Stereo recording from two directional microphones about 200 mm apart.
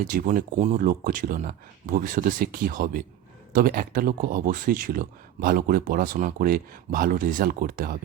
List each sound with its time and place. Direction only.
0.1 s speech: 45° right (ahead or behind)